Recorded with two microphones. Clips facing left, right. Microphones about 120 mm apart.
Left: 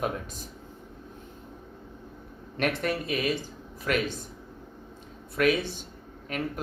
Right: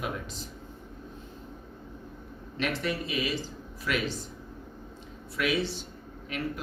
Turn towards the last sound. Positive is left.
turn(degrees=45)  # may be behind; listen again after turning